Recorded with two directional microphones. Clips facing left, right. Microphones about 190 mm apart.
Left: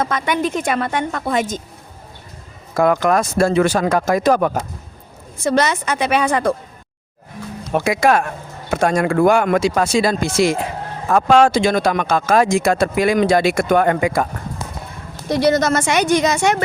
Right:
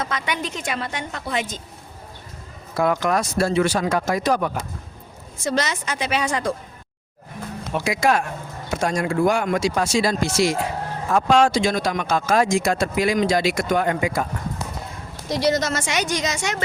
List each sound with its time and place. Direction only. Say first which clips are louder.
0.0 s speech: left 7 dB; 50° left (ahead or behind)
2.7 s speech: left 5 dB; 50° left (ahead or behind)
7.7 s speech: left 5 dB; 55° left (ahead or behind)
15.3 s speech: left 5 dB; 55° left (ahead or behind)